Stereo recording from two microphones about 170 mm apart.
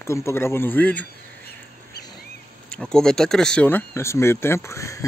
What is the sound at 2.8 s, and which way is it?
Speech, 5° left (ahead or behind).